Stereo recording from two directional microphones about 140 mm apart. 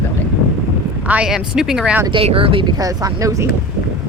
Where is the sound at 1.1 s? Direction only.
5° right (ahead or behind).